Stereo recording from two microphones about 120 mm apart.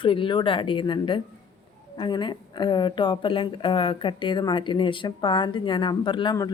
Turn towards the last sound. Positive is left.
turn(degrees=40)  # may be behind; listen again after turning